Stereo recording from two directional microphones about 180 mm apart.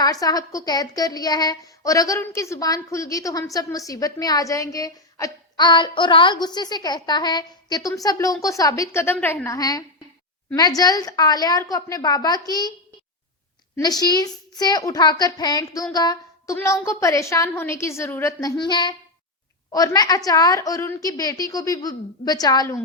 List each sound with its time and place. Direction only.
0.0 s speech: 20° left (ahead or behind)
13.7 s a woman's voice: 20° left (ahead or behind)